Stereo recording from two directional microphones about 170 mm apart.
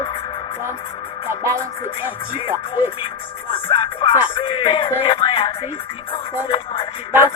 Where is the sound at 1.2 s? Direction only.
15° right (ahead or behind).